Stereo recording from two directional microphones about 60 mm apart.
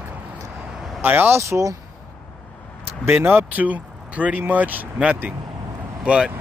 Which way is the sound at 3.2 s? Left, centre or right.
Right.